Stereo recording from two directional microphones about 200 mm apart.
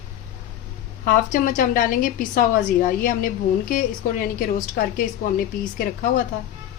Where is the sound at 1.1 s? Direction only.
40° left (ahead or behind).